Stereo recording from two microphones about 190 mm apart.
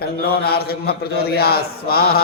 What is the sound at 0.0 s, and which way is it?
A man's voice, 55° left (ahead or behind).